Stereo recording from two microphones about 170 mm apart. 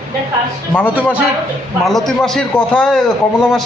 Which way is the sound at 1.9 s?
Centre (ahead or behind).